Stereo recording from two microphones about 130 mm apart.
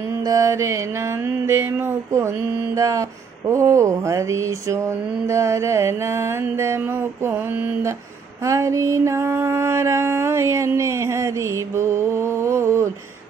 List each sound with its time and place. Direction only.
0.2 s mantra: 25° right (ahead or behind)